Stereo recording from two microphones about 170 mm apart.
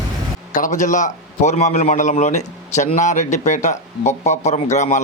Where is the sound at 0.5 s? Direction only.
45° left (ahead or behind).